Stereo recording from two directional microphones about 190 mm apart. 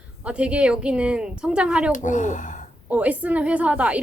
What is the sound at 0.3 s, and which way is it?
Speech, 5° right (ahead or behind).